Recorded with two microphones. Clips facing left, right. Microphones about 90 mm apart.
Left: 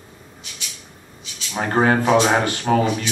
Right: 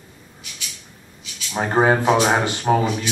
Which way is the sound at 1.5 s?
10° right (ahead or behind).